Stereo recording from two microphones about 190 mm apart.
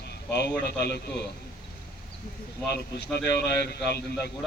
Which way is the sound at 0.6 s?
60° left (ahead or behind).